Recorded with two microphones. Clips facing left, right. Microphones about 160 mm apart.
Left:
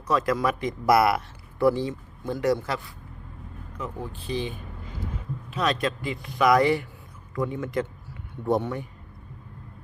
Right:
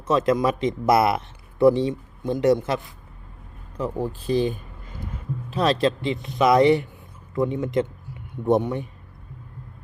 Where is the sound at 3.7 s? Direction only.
35° right (ahead or behind).